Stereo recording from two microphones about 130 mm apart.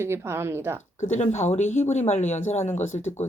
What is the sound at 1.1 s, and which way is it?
Speech, 60° left (ahead or behind).